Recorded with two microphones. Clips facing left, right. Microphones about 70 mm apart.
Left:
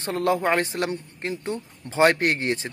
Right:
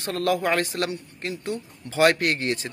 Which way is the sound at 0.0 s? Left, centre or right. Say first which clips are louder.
Left 1 dB; left.